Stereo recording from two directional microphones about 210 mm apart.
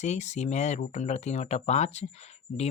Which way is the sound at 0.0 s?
35° left (ahead or behind).